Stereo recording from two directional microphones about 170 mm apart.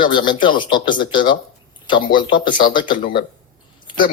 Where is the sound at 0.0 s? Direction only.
25° left (ahead or behind).